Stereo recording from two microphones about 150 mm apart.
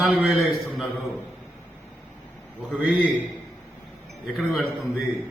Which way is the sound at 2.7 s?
10° right (ahead or behind).